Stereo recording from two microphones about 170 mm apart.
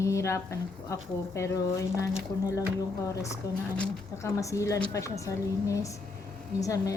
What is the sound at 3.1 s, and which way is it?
A woman's voice, 15° left (ahead or behind).